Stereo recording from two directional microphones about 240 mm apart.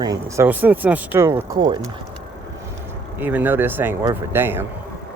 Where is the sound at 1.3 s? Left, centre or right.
Centre.